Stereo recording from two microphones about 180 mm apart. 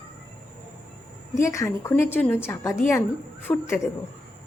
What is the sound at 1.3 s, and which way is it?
A woman's voice, 15° left (ahead or behind).